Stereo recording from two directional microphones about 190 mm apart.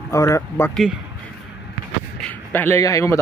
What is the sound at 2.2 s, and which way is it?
A man's voice, 10° left (ahead or behind).